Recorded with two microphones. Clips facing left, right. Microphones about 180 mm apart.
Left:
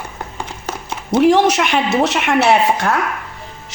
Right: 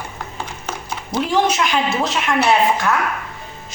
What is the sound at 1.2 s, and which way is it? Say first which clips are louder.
A woman's voice: left 6 dB; 75° left (ahead or behind).